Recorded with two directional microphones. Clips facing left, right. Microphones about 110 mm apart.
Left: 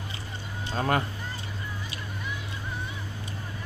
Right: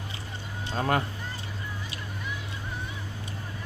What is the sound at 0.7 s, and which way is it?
Speech, 20° right (ahead or behind).